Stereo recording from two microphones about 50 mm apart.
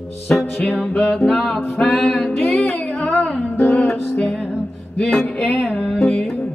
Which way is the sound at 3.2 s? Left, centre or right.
Left.